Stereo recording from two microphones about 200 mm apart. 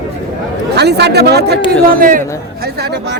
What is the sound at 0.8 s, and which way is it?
Speech, 55° right (ahead or behind).